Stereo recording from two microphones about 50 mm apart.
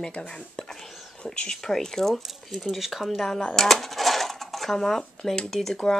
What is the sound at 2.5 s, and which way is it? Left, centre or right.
Speech, centre.